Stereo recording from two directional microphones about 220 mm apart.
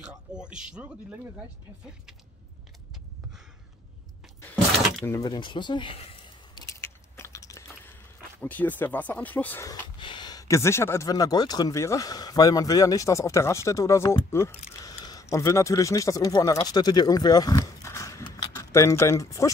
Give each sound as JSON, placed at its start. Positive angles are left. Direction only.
{"t": 0.0, "sound": "speech", "side_deg": -5}
{"t": 5.0, "sound": "a sound", "side_deg": 15}
{"t": 8.4, "sound": "speech", "side_deg": 10}